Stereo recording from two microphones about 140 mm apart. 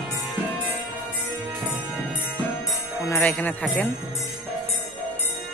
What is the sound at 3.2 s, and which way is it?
Speech, 10° left (ahead or behind).